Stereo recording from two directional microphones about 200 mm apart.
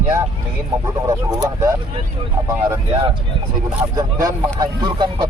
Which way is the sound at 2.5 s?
15° right (ahead or behind).